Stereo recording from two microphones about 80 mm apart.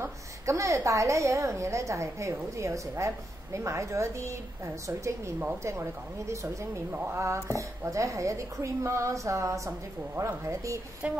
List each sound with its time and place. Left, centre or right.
0.0 s a woman's voice: right